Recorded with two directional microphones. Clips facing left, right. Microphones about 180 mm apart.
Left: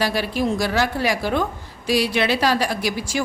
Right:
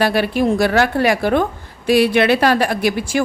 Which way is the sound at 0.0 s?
60° right (ahead or behind).